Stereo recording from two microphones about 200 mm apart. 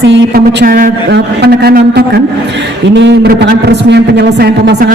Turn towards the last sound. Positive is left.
turn(degrees=-55)  # may be behind; listen again after turning